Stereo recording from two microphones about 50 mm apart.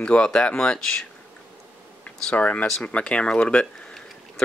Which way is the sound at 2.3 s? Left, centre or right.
Left.